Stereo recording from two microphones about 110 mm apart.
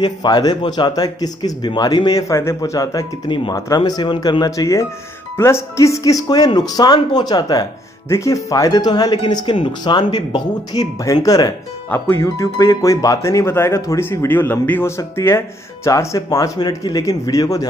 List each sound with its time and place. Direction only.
0.0 s speech: 40° left (ahead or behind)
3.3 s speech: 45° left (ahead or behind)
8.1 s speech: 30° left (ahead or behind)
11.9 s speech: 20° left (ahead or behind)